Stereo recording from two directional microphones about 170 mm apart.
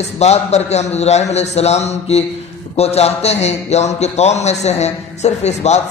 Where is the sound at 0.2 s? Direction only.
40° left (ahead or behind).